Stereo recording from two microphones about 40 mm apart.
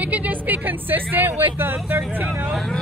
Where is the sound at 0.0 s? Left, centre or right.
Right.